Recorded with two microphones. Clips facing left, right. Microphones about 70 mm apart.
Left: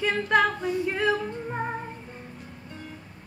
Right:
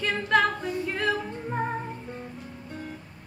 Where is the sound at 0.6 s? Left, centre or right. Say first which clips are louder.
Left 3 dB; centre.